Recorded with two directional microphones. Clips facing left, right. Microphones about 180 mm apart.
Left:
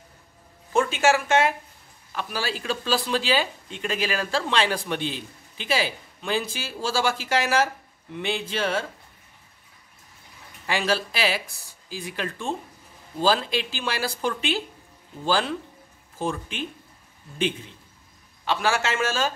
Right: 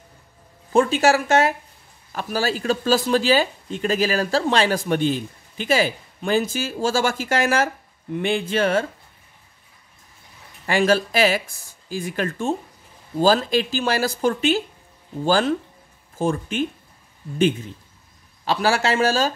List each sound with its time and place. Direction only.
0.7 s speech: 35° right (ahead or behind); by 8.8 s 50° right (ahead or behind)
10.7 s speech: 50° right (ahead or behind)
18.4 s speech: 35° right (ahead or behind)